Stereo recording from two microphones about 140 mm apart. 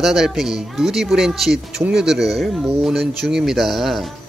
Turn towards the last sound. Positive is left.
turn(degrees=0)  # may be behind; listen again after turning